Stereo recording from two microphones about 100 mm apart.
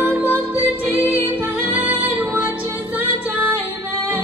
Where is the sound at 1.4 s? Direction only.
15° right (ahead or behind).